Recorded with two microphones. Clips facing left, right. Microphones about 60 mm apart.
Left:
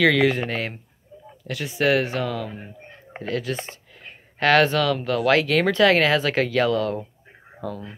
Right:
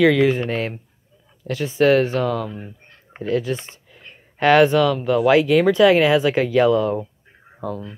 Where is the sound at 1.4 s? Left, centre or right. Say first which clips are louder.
Right 6 dB; right.